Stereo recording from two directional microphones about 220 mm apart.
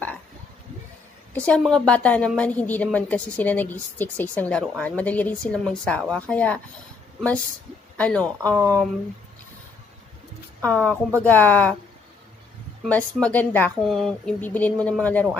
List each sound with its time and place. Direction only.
1.3 s a woman's voice: 5° left (ahead or behind)
8.0 s speech: 5° left (ahead or behind)
10.6 s a woman's voice: 5° left (ahead or behind)
12.8 s speech: 5° left (ahead or behind)